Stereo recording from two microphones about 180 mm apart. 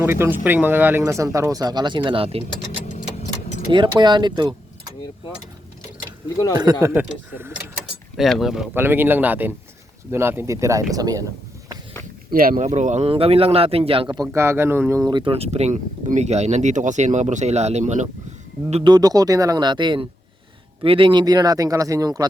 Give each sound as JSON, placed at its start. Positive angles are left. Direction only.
{"t": 0.0, "sound": "speech", "side_deg": -15}
{"t": 3.7, "sound": "speech", "side_deg": -25}
{"t": 6.8, "sound": "speech", "side_deg": -10}
{"t": 8.1, "sound": "speech", "side_deg": 0}
{"t": 12.3, "sound": "speech", "side_deg": -50}
{"t": 12.6, "sound": "a man's voice", "side_deg": -40}
{"t": 18.7, "sound": "speech", "side_deg": -25}